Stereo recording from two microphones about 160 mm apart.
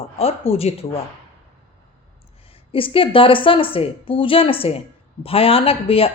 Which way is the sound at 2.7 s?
35° left (ahead or behind).